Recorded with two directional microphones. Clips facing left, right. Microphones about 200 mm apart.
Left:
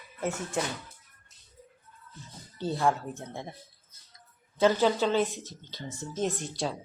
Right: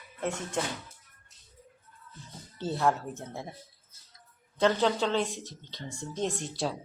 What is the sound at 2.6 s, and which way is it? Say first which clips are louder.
Speech: even; centre (ahead or behind).